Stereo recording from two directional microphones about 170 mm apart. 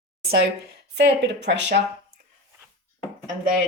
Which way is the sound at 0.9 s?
90° right.